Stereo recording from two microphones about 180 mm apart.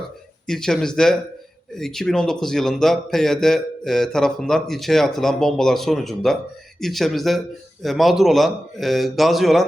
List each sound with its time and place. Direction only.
0.4 s a man's voice: 5° left (ahead or behind)